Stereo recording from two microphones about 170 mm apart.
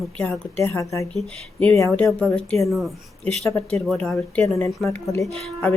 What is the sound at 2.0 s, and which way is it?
A woman's voice, centre (ahead or behind).